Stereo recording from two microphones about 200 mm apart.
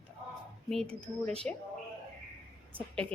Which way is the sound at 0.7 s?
5° left (ahead or behind).